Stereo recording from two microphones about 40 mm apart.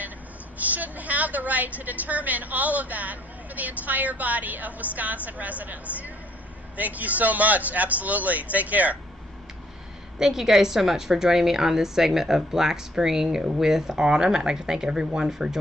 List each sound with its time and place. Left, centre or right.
0.6 s a woman's voice: right
10.2 s a woman's voice: centre